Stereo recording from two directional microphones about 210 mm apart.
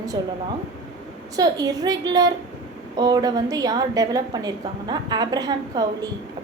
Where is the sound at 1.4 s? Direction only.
15° right (ahead or behind).